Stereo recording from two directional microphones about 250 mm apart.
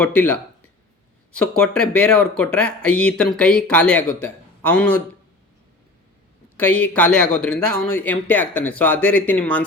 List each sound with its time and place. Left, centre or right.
0.0 s speech: centre
6.6 s speech: centre